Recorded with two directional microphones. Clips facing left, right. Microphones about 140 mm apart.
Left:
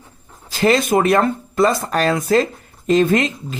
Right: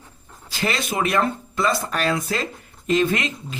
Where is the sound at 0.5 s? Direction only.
45° left (ahead or behind).